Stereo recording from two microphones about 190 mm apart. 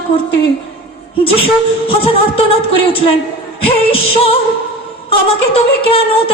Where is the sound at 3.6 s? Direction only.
30° left (ahead or behind).